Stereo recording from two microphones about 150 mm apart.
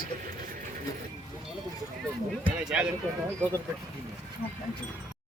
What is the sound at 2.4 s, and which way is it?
Speech, 10° right (ahead or behind).